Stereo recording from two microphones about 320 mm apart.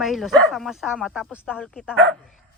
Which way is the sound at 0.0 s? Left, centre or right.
Centre.